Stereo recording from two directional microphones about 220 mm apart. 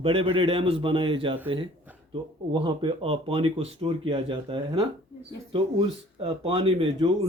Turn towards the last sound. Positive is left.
turn(degrees=-25)  # may be behind; listen again after turning